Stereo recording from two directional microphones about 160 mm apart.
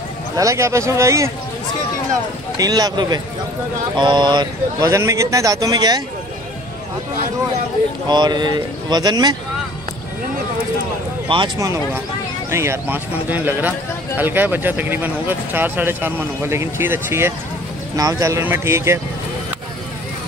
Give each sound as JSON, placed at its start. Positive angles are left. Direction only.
{"t": 0.4, "sound": "speech", "side_deg": -20}
{"t": 2.5, "sound": "speech", "side_deg": -25}
{"t": 8.1, "sound": "speech", "side_deg": -25}
{"t": 11.2, "sound": "speech", "side_deg": -30}
{"t": 11.5, "sound": "speech", "side_deg": -20}